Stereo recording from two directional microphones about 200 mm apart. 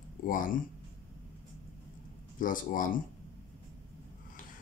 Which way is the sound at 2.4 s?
40° left (ahead or behind).